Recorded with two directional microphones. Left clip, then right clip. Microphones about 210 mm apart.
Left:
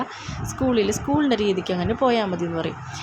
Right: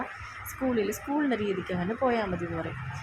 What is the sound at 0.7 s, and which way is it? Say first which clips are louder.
Speech: left 8 dB; 20° left (ahead or behind).